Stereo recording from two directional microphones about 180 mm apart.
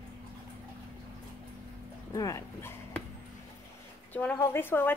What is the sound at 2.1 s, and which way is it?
Speech, 15° left (ahead or behind).